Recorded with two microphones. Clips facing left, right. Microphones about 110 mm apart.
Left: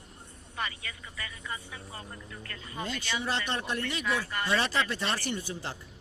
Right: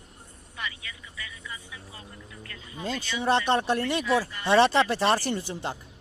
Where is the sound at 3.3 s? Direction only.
60° right (ahead or behind).